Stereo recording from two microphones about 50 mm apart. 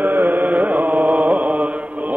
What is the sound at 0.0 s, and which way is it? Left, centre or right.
Mantra, right.